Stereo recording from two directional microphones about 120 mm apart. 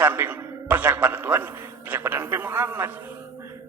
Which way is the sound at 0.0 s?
15° right (ahead or behind).